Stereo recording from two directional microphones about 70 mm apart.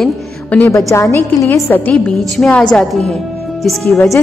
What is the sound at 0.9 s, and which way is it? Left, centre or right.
Speech, left.